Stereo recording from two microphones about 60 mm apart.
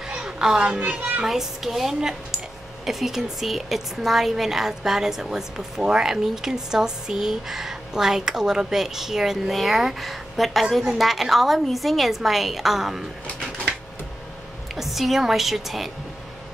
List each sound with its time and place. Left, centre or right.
0.1 s a child's voice: centre
1.2 s a woman's voice: centre
14.8 s a woman's voice: centre